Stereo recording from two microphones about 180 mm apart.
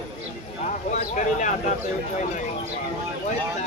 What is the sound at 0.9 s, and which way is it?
Speech, 40° left (ahead or behind).